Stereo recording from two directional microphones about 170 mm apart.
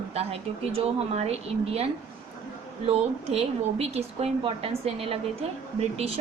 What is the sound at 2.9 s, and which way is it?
A woman's voice, 40° right (ahead or behind).